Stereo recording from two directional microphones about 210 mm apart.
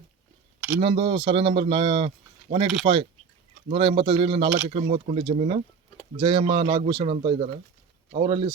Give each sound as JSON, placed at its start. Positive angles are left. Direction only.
{"t": 0.8, "sound": "speech", "side_deg": -25}